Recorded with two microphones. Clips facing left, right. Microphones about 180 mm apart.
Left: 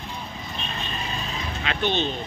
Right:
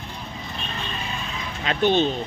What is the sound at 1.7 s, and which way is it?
Speech, 45° right (ahead or behind).